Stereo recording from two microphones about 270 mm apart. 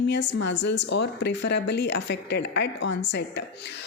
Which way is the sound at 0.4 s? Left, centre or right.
Left.